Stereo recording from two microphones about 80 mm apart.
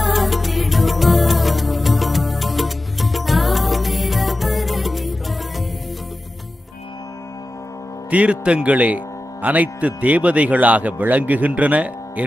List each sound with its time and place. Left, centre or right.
0.0 s music: centre
8.1 s speech: centre